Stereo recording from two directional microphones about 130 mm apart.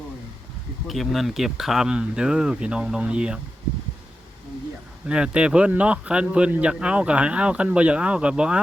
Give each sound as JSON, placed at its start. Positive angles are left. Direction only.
{"t": 0.9, "sound": "speech", "side_deg": 0}
{"t": 5.0, "sound": "a man's voice", "side_deg": -5}